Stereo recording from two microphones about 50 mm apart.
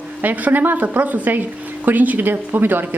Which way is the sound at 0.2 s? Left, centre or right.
Right.